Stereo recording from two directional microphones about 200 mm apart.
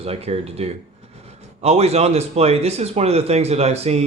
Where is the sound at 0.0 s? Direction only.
30° right (ahead or behind).